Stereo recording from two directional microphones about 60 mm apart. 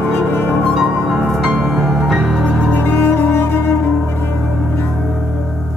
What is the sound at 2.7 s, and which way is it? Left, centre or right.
Music, left.